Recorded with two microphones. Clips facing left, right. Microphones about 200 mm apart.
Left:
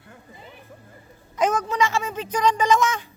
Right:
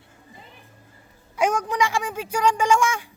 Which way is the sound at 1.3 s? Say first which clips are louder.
Even; 10° right (ahead or behind).